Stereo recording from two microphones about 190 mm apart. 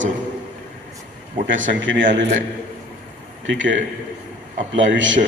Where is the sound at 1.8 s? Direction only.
75° right (ahead or behind).